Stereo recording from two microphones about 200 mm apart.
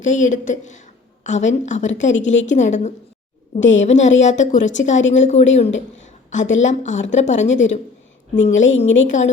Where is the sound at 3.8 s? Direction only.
35° left (ahead or behind).